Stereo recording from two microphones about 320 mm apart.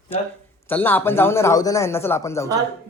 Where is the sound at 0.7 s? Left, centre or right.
Centre.